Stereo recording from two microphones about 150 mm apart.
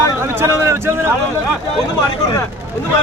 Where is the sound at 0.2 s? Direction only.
15° right (ahead or behind).